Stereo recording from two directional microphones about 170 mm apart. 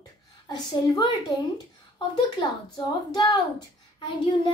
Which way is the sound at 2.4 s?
25° left (ahead or behind).